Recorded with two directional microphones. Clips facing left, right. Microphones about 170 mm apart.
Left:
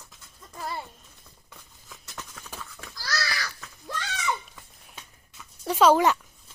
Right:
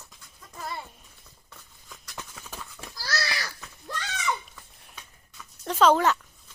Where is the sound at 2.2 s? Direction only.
10° right (ahead or behind).